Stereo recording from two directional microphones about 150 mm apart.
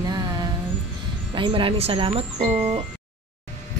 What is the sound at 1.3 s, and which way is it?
Speech, 35° right (ahead or behind).